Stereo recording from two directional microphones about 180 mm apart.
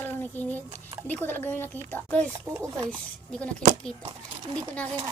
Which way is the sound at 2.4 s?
15° right (ahead or behind).